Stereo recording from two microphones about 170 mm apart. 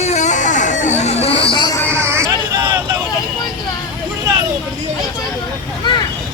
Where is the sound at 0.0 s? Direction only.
45° left (ahead or behind); by 1.8 s 25° left (ahead or behind).